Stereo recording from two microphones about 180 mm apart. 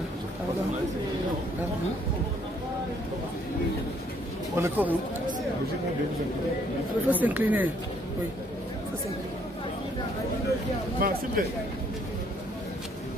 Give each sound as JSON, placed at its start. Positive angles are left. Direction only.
{"t": 4.6, "sound": "speech", "side_deg": -10}
{"t": 7.1, "sound": "speech", "side_deg": -10}
{"t": 11.0, "sound": "speech", "side_deg": -55}